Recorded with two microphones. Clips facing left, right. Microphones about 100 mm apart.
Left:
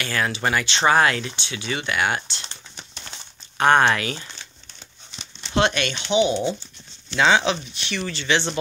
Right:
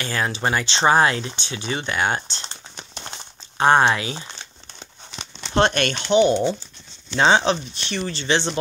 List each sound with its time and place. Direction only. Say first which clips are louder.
0.0 s speech: even; 30° right (ahead or behind)
3.0 s crumpling: right 7 dB; 35° right (ahead or behind)
3.6 s speech: right 1 dB; 25° right (ahead or behind)
5.5 s speech: right 2 dB; 40° right (ahead or behind)